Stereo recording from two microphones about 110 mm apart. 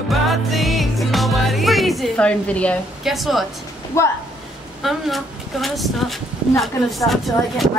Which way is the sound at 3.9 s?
25° left (ahead or behind).